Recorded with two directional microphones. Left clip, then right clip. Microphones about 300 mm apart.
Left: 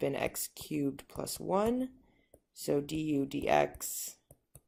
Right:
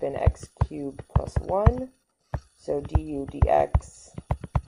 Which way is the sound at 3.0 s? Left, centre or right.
Left.